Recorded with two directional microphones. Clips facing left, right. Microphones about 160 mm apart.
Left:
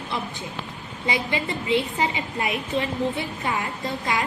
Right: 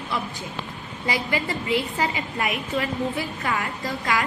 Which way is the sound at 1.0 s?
20° left (ahead or behind).